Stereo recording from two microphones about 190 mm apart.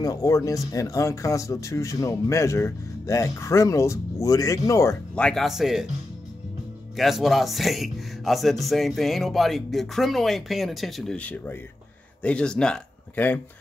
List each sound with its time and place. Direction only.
0.0 s speech: 20° left (ahead or behind); by 5.9 s centre (ahead or behind)
7.0 s speech: centre (ahead or behind)